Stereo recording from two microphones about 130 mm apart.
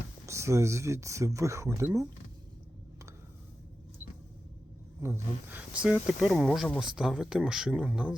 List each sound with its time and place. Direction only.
0.3 s speech: 20° right (ahead or behind)
5.0 s speech: 15° right (ahead or behind)